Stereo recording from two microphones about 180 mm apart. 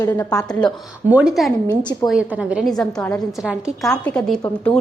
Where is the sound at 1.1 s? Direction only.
5° right (ahead or behind).